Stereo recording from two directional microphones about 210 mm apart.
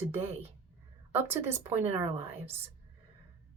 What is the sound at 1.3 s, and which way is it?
Speech, 10° right (ahead or behind).